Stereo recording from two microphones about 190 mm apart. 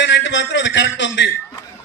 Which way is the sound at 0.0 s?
70° left (ahead or behind).